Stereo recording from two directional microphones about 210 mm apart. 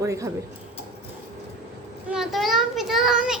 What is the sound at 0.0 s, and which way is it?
Speech, 15° right (ahead or behind).